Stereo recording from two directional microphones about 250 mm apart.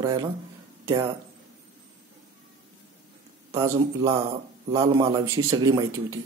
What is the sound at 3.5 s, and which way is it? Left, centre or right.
A man's voice, centre.